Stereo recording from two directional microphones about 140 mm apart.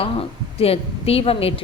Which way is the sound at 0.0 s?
45° left (ahead or behind).